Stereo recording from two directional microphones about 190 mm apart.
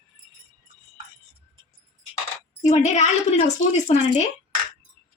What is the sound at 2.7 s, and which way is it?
A woman's voice, 35° left (ahead or behind).